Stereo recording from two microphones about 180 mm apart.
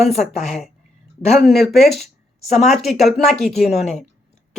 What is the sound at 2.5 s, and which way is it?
Speech, 40° left (ahead or behind).